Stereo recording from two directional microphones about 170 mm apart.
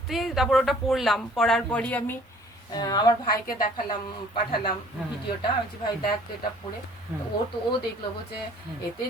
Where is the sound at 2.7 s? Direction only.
20° left (ahead or behind).